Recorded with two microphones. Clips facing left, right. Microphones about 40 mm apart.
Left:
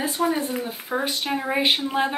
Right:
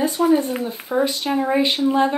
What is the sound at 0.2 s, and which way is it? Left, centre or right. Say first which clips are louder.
Speech: right 6 dB; centre.